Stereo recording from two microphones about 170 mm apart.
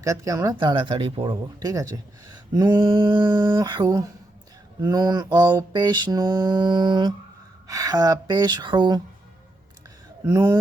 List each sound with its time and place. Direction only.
0.0 s mantra: 20° right (ahead or behind)
10.2 s mantra: 20° right (ahead or behind)